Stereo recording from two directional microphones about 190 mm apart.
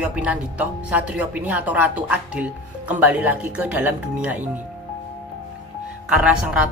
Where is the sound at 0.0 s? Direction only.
5° right (ahead or behind).